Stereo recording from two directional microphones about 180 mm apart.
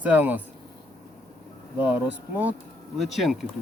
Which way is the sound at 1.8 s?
10° right (ahead or behind).